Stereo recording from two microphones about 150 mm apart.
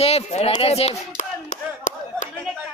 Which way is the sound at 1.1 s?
55° left (ahead or behind).